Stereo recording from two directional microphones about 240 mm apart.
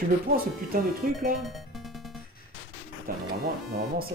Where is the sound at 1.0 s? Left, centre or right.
Right.